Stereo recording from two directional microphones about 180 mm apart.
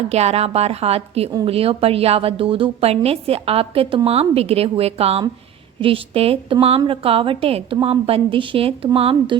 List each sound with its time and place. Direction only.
0.1 s a woman's voice: 35° right (ahead or behind)